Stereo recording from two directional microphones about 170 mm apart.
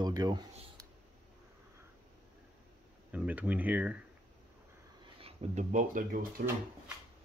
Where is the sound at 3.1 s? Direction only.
10° right (ahead or behind).